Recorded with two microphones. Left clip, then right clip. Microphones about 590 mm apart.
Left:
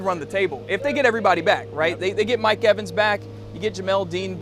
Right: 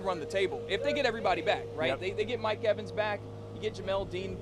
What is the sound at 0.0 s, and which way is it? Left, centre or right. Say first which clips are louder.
Speech: left 8 dB; left.